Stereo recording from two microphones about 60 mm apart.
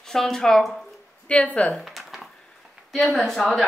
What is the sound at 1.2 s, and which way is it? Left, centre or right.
Speech, left.